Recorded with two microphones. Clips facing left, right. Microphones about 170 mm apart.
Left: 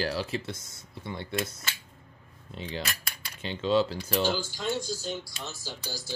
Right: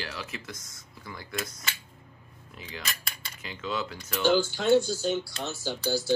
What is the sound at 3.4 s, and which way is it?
Speech, 30° left (ahead or behind).